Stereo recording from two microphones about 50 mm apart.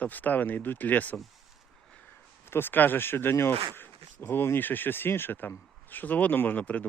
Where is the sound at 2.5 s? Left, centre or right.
Left.